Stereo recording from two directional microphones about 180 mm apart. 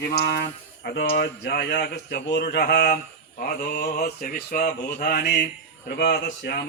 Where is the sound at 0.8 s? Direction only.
60° left (ahead or behind).